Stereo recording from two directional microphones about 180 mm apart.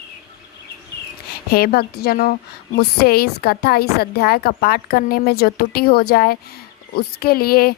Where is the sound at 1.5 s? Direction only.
60° left (ahead or behind).